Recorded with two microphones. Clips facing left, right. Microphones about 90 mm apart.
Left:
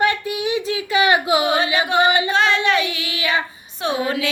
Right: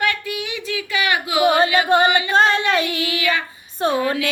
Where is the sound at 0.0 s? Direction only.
25° left (ahead or behind).